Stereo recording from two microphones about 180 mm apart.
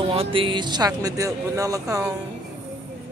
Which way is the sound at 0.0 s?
30° right (ahead or behind).